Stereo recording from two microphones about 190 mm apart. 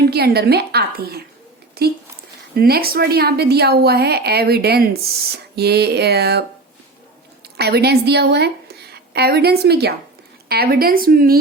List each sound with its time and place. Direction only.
0.1 s a woman's voice: 55° right (ahead or behind)
7.5 s a woman's voice: 60° right (ahead or behind)